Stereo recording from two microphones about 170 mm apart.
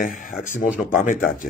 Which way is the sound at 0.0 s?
50° left (ahead or behind).